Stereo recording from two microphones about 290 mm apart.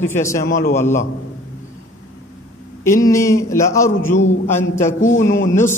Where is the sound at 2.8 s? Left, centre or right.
Centre.